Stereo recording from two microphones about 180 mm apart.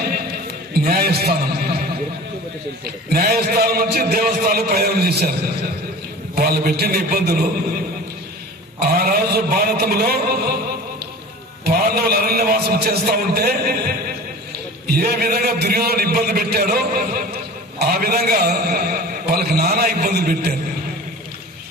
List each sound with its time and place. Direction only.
0.1 s a sound: 60° right (ahead or behind)
3.1 s a man's voice: 60° right (ahead or behind)
6.3 s a man's voice: 60° right (ahead or behind)
8.8 s a man's voice: 60° right (ahead or behind)
11.6 s a man's voice: 55° right (ahead or behind)